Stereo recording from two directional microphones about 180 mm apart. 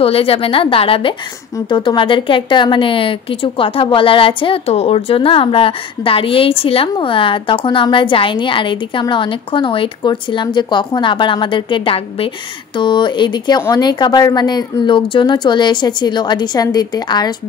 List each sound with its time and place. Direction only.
0.0 s a woman's voice: 35° left (ahead or behind)